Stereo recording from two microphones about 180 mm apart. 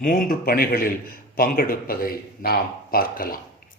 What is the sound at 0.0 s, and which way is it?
A man's voice, 50° left (ahead or behind).